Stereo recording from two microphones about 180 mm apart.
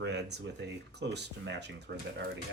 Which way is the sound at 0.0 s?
70° right (ahead or behind).